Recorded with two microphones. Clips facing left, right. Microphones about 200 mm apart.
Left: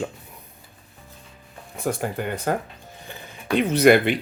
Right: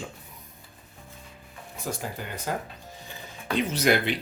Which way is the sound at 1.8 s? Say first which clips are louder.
Left 8 dB; 60° left (ahead or behind).